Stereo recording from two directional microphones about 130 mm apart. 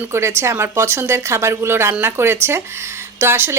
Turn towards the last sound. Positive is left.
turn(degrees=-20)  # may be behind; listen again after turning